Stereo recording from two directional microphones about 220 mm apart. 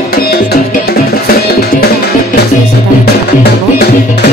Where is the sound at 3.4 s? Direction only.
45° left (ahead or behind).